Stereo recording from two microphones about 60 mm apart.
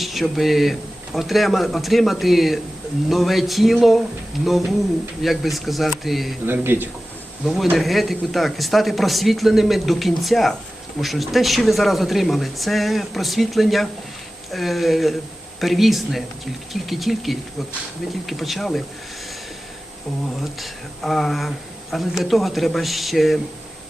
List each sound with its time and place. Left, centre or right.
0.0 s speech: centre
6.4 s speech: right
7.4 s speech: centre
20.4 s speech: centre